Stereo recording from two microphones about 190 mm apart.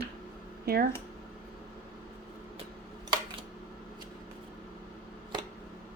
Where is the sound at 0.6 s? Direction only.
55° right (ahead or behind).